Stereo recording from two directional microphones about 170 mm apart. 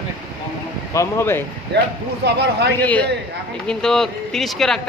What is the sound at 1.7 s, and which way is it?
Speech, 75° right (ahead or behind).